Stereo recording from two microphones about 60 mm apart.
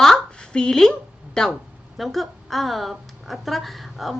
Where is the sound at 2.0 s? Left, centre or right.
Centre.